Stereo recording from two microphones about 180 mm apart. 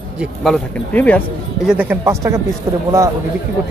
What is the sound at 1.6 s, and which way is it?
Speech, 5° right (ahead or behind).